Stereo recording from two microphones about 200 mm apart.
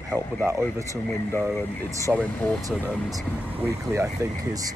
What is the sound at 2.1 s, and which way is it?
Speech, 5° right (ahead or behind).